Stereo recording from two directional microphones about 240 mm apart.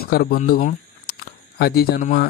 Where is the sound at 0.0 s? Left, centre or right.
Left.